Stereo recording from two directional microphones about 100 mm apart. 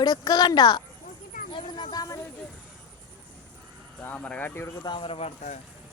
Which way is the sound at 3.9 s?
15° left (ahead or behind).